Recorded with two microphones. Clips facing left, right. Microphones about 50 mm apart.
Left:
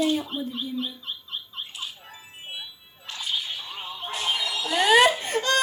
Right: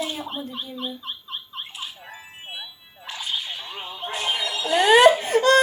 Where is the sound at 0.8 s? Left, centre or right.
Right.